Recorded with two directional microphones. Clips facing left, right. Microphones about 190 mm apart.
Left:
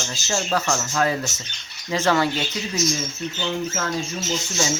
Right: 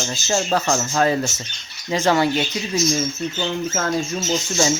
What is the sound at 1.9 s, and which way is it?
Speech, 20° right (ahead or behind).